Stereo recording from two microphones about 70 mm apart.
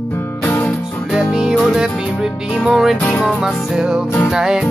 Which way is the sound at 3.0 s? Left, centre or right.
Left.